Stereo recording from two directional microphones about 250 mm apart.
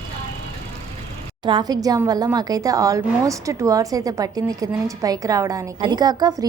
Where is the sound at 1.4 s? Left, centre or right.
Centre.